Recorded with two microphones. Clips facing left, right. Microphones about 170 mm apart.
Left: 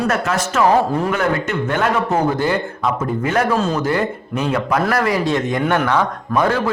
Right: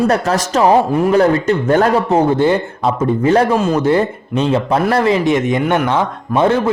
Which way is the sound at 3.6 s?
20° right (ahead or behind).